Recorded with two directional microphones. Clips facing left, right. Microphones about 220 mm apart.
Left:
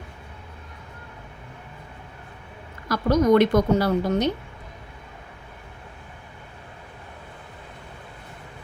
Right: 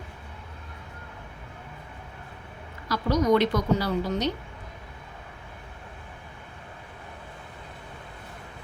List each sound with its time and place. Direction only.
2.9 s a woman's voice: 50° left (ahead or behind)